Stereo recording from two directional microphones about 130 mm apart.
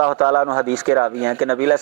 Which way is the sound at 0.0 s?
20° right (ahead or behind).